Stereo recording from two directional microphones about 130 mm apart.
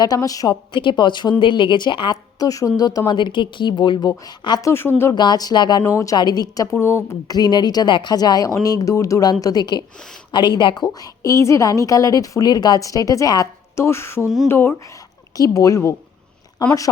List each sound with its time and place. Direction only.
0.0 s a woman's voice: 30° left (ahead or behind)
4.7 s a woman's voice: 20° left (ahead or behind)
5.1 s a woman's voice: 35° left (ahead or behind)